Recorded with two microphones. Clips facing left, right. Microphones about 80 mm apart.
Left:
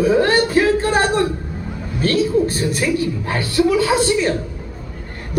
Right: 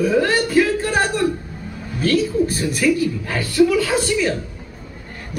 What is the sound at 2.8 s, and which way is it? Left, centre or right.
A woman's voice, left.